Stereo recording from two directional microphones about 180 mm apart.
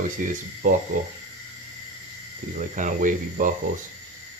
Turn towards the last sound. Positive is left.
turn(degrees=-45)  # may be behind; listen again after turning